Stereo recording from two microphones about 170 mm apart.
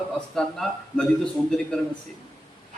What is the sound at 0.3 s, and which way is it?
A man's voice, 5° left (ahead or behind).